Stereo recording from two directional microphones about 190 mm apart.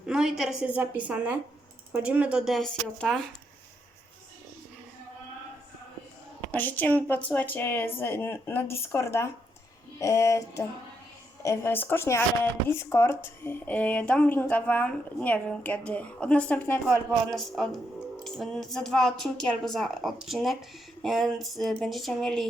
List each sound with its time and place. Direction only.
0.0 s a woman's voice: 5° right (ahead or behind)
6.5 s a woman's voice: 10° left (ahead or behind)